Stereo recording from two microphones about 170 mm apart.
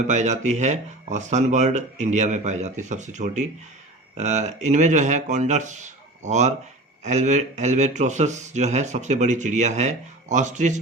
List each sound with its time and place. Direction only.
0.0 s speech: 45° right (ahead or behind)